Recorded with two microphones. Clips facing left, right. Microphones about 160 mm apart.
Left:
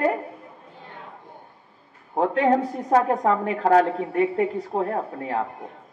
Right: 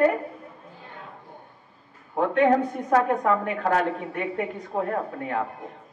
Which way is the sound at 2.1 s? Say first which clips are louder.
Even; 30° left (ahead or behind).